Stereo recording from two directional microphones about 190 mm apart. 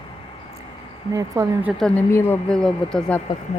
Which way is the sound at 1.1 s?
15° right (ahead or behind).